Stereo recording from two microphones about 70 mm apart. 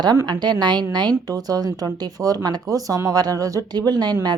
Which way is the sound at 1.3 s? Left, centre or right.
Right.